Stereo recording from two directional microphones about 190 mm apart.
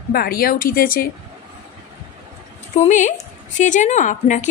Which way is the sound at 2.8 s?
40° left (ahead or behind).